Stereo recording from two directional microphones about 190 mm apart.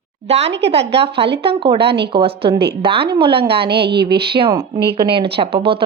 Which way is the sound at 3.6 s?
60° right (ahead or behind).